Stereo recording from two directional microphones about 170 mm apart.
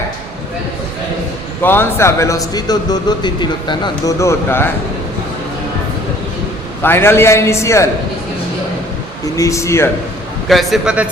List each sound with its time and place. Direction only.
1.6 s a man's voice: 15° left (ahead or behind)
6.8 s a man's voice: 15° left (ahead or behind)
9.3 s a man's voice: 20° left (ahead or behind)
10.5 s a man's voice: centre (ahead or behind)